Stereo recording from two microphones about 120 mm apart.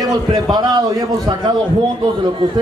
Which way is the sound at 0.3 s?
35° right (ahead or behind).